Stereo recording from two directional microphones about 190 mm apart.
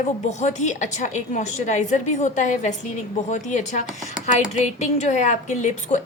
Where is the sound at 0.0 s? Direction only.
40° left (ahead or behind).